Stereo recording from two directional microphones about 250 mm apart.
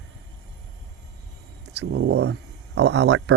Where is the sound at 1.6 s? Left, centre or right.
Right.